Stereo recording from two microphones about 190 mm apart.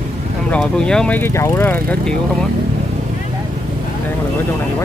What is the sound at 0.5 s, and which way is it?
Speech, 5° left (ahead or behind).